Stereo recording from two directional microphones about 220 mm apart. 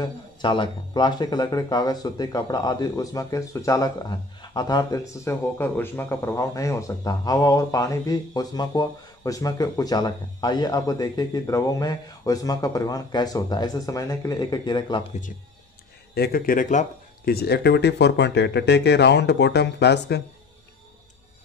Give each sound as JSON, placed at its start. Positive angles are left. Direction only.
{"t": 0.0, "sound": "speech", "side_deg": 20}
{"t": 16.2, "sound": "speech", "side_deg": 45}